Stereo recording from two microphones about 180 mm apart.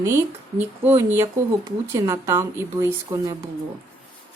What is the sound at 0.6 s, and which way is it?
Speech, 10° right (ahead or behind).